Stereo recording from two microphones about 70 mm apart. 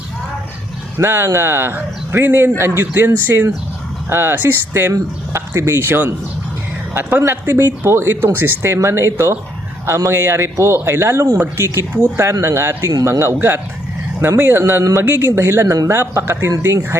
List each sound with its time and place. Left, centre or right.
0.9 s speech: right